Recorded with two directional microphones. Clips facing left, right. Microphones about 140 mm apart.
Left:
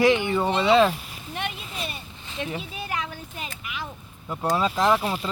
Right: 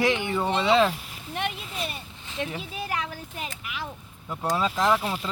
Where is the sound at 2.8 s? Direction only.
45° right (ahead or behind).